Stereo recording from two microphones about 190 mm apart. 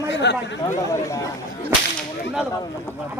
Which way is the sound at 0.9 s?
15° left (ahead or behind).